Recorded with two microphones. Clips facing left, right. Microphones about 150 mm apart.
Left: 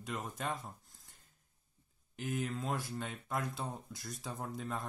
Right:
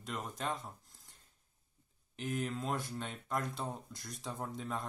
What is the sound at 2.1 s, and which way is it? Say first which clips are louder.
Speech: even; centre (ahead or behind).